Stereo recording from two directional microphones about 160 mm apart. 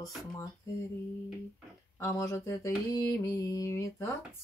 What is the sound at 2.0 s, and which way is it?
Mantra, 20° left (ahead or behind).